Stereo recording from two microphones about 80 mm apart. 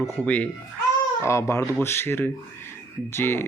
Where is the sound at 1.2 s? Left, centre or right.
Left.